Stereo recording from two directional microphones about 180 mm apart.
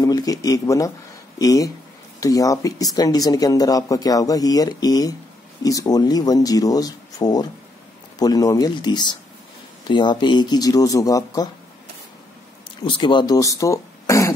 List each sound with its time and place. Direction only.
0.0 s speech: 20° left (ahead or behind)
12.8 s speech: 25° left (ahead or behind)